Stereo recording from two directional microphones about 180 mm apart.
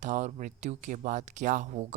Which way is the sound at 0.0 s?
45° right (ahead or behind).